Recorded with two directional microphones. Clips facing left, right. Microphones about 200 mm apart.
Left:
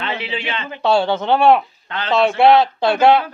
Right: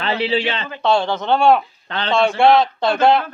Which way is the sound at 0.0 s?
35° right (ahead or behind).